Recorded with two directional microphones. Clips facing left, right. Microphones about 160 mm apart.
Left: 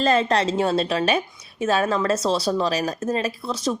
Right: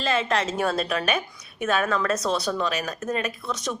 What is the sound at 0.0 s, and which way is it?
A woman's voice, 35° left (ahead or behind).